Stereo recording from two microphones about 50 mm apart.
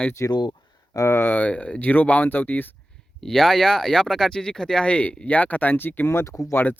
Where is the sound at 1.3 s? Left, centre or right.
Left.